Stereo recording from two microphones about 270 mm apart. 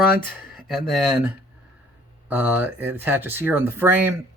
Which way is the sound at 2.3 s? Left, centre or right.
Centre.